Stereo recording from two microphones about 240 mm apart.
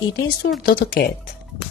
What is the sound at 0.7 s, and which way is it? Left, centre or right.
Speech, left.